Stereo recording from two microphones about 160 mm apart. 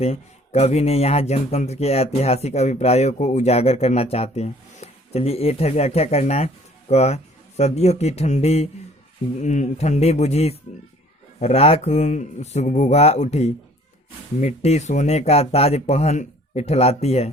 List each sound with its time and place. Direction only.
0.0 s speech: 40° left (ahead or behind)